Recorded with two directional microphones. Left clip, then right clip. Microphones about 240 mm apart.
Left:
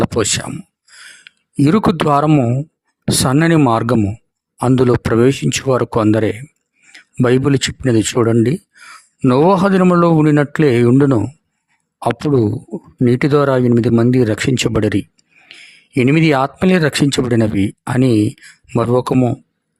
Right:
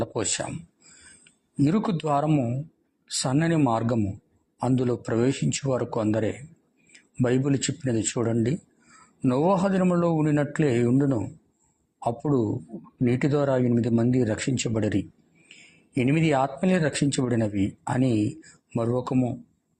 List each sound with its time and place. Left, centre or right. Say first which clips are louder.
0.0 s speech: left 11 dB; left
1.6 s speech: left 12 dB; left